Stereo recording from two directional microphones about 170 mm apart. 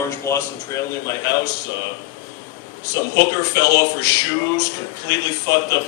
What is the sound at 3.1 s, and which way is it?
Speech, 20° left (ahead or behind).